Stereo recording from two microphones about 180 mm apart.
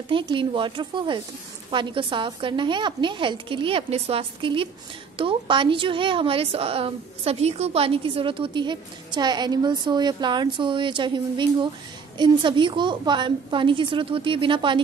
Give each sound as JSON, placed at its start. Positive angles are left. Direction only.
{"t": 0.1, "sound": "a woman's voice", "side_deg": -25}